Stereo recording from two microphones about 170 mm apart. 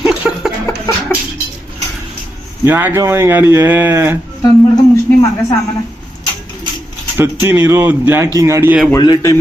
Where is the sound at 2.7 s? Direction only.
15° right (ahead or behind).